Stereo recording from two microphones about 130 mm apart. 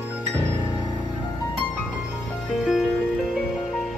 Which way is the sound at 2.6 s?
Centre (ahead or behind).